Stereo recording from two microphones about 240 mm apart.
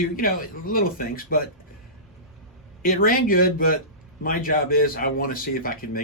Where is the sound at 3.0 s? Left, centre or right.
Left.